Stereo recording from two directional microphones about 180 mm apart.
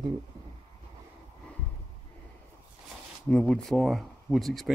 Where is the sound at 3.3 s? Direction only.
5° left (ahead or behind).